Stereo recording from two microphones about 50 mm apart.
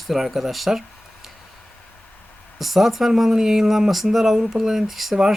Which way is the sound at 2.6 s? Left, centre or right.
Centre.